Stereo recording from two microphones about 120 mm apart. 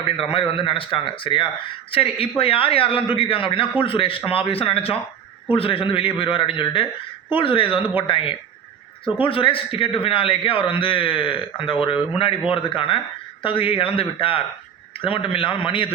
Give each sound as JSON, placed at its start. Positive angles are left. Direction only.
{"t": 0.2, "sound": "a man's voice", "side_deg": 50}